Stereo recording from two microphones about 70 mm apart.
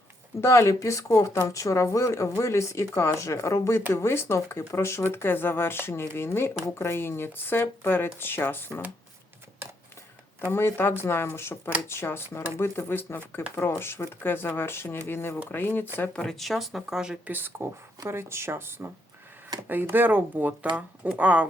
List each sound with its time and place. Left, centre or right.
0.4 s speech: left
10.5 s speech: left
16.1 s speech: centre
17.2 s speech: right
18.1 s speech: right